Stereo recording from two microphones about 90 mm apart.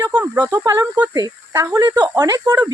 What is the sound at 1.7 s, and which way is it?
Speech, 50° right (ahead or behind).